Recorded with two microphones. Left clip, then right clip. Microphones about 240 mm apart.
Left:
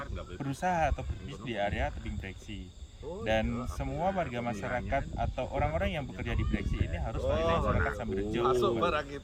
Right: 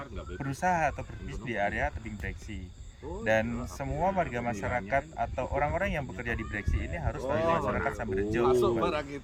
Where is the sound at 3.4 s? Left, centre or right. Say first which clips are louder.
Right 1 dB; centre.